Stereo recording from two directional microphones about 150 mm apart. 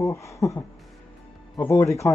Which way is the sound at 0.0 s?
20° left (ahead or behind).